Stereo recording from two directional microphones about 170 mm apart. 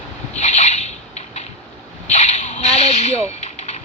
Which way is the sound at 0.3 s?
40° left (ahead or behind).